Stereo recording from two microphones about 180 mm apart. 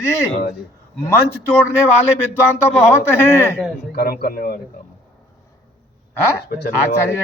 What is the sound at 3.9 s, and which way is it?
Speech, 60° left (ahead or behind).